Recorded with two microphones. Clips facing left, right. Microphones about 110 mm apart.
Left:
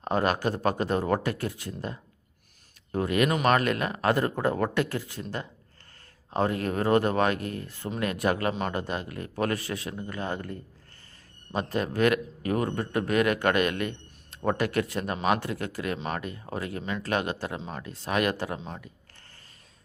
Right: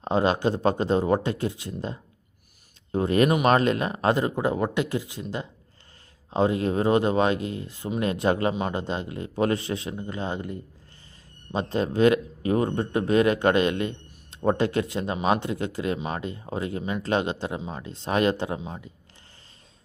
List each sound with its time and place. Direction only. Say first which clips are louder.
0.0 s a man's voice: right 3 dB; 20° right (ahead or behind)